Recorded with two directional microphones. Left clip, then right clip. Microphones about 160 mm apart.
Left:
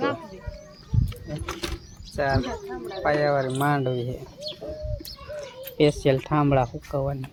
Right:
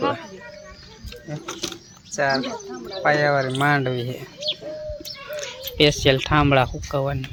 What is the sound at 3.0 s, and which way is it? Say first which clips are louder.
Speech: right 4 dB; 10° right (ahead or behind).